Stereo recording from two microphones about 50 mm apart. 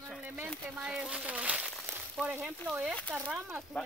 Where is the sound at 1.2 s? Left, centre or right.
Right.